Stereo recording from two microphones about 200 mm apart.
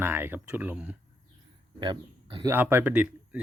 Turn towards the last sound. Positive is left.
turn(degrees=-5)  # may be behind; listen again after turning